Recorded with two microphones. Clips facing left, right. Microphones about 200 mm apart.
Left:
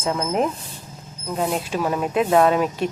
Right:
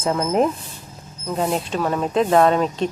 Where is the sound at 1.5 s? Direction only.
10° left (ahead or behind).